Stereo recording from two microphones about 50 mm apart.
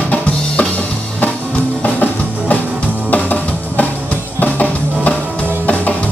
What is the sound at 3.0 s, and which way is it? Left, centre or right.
Music, left.